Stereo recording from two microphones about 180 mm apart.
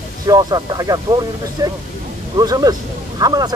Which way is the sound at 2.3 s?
20° right (ahead or behind).